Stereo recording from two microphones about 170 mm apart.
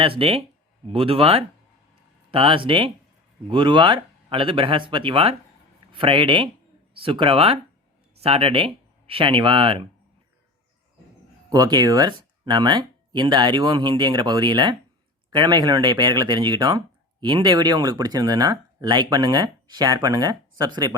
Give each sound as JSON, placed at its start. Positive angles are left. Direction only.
{"t": 0.0, "sound": "speech", "side_deg": -35}
{"t": 11.4, "sound": "speech", "side_deg": -25}